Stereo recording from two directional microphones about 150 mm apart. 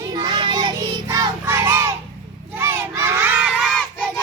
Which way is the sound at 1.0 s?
20° right (ahead or behind).